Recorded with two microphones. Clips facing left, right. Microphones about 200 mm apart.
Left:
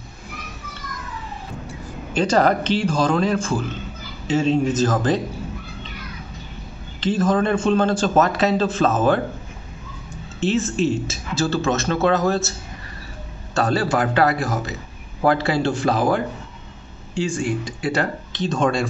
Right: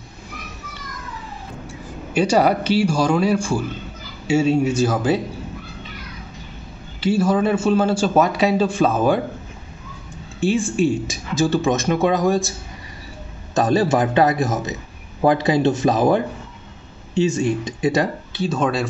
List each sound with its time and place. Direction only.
2.1 s a man's voice: 10° right (ahead or behind)
7.0 s a man's voice: 10° right (ahead or behind)
10.4 s a man's voice: 10° right (ahead or behind)
13.6 s a man's voice: 20° right (ahead or behind)
18.3 s a man's voice: 5° right (ahead or behind)